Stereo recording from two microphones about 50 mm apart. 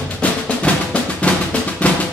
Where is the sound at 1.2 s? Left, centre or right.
Left.